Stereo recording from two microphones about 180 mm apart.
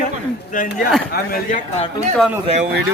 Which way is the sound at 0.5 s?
50° left (ahead or behind).